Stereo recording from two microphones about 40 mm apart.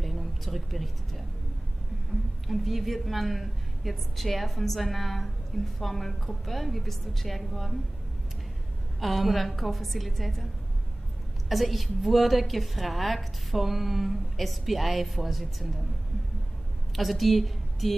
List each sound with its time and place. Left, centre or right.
0.0 s speech: centre
2.4 s a woman's voice: centre
9.0 s a woman's voice: centre
11.4 s a woman's voice: centre
16.9 s a woman's voice: centre